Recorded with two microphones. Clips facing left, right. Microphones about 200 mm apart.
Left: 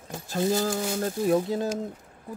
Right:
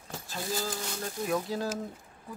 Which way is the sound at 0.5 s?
45° left (ahead or behind).